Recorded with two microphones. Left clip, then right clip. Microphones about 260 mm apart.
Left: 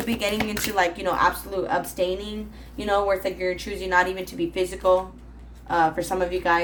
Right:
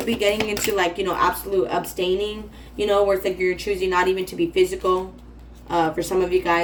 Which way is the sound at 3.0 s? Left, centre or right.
Left.